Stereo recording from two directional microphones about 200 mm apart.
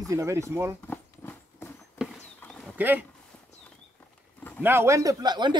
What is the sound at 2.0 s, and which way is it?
Horse, 5° right (ahead or behind).